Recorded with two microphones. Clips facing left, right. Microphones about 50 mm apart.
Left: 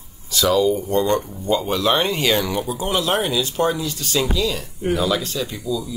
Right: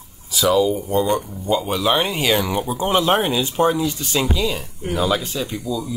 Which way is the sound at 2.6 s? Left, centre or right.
Right.